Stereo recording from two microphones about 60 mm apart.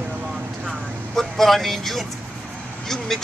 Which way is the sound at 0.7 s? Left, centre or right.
Centre.